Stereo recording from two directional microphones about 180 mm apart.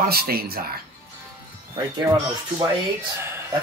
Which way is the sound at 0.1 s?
60° right (ahead or behind).